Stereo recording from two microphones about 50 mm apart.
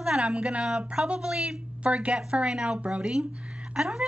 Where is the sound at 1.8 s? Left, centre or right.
Right.